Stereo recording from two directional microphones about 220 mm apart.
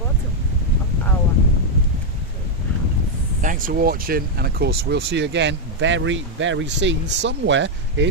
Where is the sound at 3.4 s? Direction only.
40° right (ahead or behind).